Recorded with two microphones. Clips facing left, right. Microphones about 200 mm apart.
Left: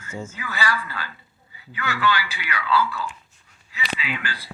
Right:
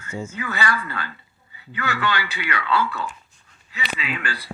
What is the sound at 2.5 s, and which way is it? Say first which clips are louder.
Speech: left 1 dB; 60° right (ahead or behind).